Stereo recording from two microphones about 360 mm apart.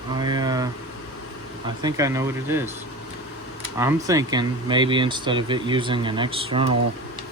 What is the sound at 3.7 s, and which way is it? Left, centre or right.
Speech, centre.